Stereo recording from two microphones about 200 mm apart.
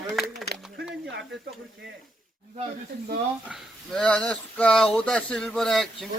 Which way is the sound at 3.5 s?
5° left (ahead or behind).